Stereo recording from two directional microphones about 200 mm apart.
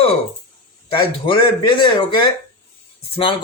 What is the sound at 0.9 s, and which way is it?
A man's voice, 25° left (ahead or behind).